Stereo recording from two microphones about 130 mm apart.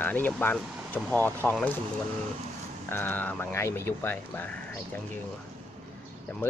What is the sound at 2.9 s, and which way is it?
Speech, 15° left (ahead or behind).